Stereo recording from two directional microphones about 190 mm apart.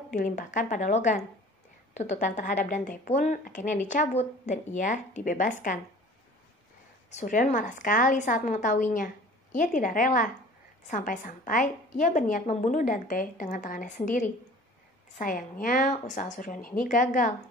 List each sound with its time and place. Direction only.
0.1 s a woman's voice: 40° left (ahead or behind)
7.1 s a woman's voice: 40° left (ahead or behind)